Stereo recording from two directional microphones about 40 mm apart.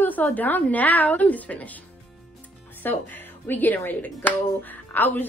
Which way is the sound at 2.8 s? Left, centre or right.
Left.